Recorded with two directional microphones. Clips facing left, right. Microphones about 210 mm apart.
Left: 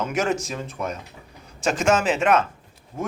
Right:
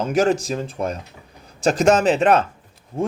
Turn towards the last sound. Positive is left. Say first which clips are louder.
# right 6 dB
turn(degrees=-30)  # may be behind; listen again after turning